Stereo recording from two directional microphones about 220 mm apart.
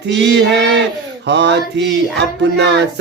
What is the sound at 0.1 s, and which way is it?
Speech, 50° right (ahead or behind).